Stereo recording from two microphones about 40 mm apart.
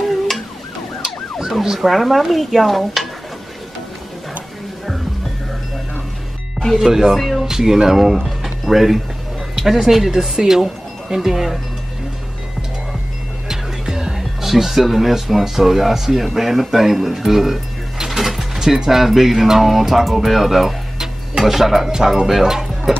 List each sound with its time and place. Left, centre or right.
1.6 s speech: centre
6.8 s speech: centre
13.5 s music: centre
14.4 s speech: centre